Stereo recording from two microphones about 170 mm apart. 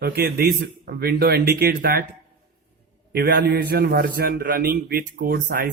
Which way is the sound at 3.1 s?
65° right (ahead or behind).